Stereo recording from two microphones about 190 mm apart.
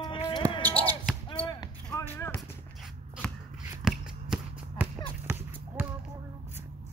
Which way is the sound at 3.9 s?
5° right (ahead or behind).